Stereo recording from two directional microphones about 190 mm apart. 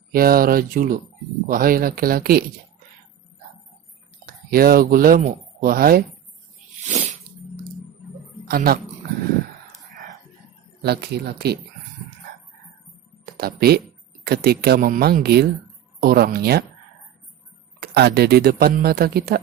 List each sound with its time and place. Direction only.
0.1 s speech: 50° right (ahead or behind)
4.3 s speech: 50° right (ahead or behind)
8.4 s speech: 50° right (ahead or behind)
10.8 s speech: 55° right (ahead or behind)
13.2 s speech: 55° right (ahead or behind)
17.7 s speech: 60° right (ahead or behind)